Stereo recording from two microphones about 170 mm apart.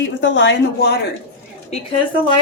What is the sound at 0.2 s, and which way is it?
Speech, 90° left.